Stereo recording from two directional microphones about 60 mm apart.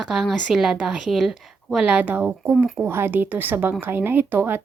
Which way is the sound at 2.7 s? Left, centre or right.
Right.